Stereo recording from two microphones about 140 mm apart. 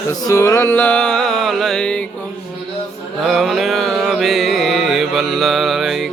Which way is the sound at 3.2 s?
Centre (ahead or behind).